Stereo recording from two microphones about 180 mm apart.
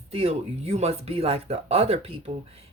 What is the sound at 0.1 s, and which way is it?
Speech, 35° right (ahead or behind).